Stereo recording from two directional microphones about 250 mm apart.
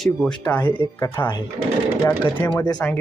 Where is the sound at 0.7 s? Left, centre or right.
Centre.